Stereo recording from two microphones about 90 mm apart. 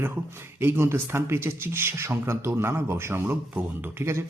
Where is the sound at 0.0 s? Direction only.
25° right (ahead or behind).